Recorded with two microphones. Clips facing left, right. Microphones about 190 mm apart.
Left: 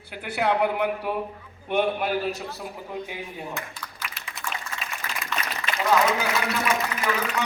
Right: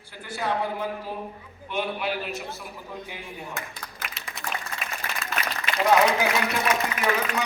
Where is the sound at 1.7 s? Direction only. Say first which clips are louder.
Left 5 dB; 50° left (ahead or behind).